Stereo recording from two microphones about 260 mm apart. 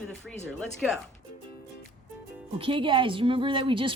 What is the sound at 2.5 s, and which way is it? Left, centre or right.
A woman's voice, centre.